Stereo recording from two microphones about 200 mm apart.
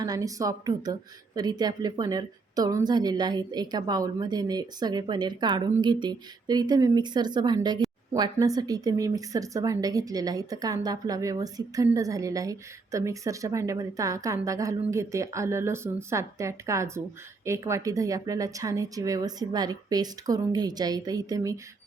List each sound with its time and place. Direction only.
0.0 s a woman's voice: 20° right (ahead or behind)